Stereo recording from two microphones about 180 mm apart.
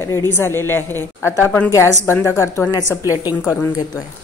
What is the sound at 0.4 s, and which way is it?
A woman's voice, 15° left (ahead or behind).